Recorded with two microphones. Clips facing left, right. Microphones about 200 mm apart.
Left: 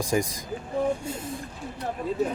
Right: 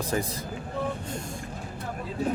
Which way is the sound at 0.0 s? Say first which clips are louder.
Left 3 dB; 10° left (ahead or behind).